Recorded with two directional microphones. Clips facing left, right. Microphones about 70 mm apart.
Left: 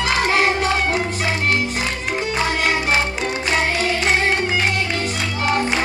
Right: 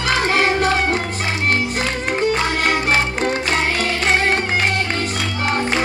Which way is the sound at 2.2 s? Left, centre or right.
Right.